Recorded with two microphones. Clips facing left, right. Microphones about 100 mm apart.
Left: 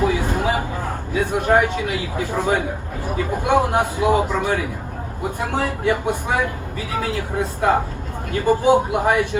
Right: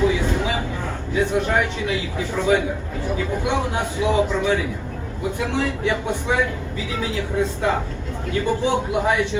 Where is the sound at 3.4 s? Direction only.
45° left (ahead or behind).